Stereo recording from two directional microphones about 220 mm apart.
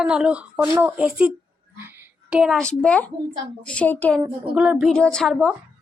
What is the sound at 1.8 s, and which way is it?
A woman's voice, 10° right (ahead or behind).